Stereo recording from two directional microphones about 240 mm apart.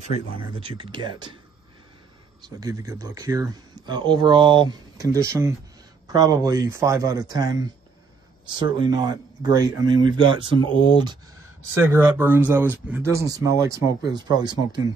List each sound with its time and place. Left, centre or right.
0.3 s speech: right
2.6 s speech: centre